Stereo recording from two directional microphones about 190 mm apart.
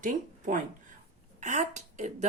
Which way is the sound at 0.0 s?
45° right (ahead or behind).